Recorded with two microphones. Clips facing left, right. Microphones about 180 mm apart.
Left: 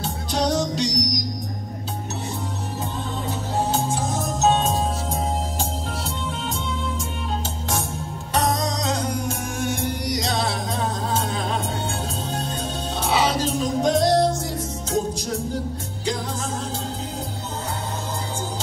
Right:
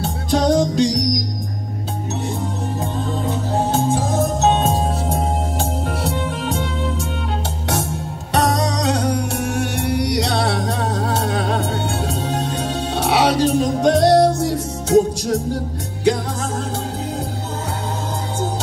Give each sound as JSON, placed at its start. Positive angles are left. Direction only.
{"t": 0.3, "sound": "music", "side_deg": -50}
{"t": 8.3, "sound": "music", "side_deg": -70}
{"t": 12.9, "sound": "music", "side_deg": -70}